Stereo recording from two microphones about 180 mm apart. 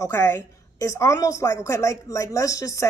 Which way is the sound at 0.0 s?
15° left (ahead or behind).